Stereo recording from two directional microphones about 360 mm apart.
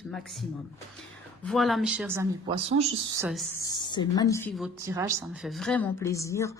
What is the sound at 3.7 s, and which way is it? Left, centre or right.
A woman's voice, centre.